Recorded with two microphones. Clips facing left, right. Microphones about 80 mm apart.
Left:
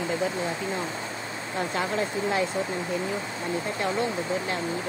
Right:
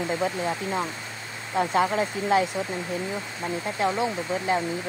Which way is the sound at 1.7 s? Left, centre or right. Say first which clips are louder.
Right 4 dB; centre.